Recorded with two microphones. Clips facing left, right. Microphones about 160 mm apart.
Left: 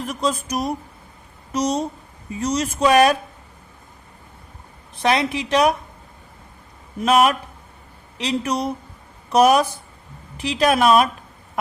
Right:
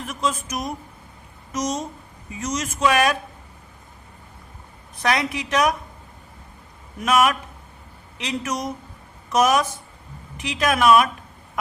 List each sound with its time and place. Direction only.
0.1 s speech: 35° left (ahead or behind)
5.0 s a woman's voice: 30° left (ahead or behind)
7.0 s speech: 30° left (ahead or behind)